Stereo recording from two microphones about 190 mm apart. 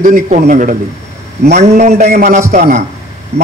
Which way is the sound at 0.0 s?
40° right (ahead or behind).